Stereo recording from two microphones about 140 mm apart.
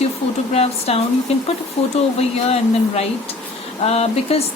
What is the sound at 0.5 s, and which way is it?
A woman's voice, 45° left (ahead or behind).